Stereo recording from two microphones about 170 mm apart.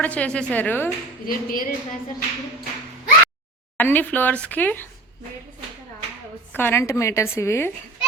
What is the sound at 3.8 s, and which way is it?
A woman's voice, 10° left (ahead or behind).